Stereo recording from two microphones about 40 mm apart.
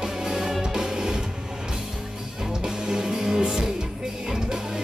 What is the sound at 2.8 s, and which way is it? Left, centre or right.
Music, centre.